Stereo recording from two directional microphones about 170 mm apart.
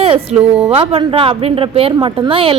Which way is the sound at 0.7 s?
35° right (ahead or behind).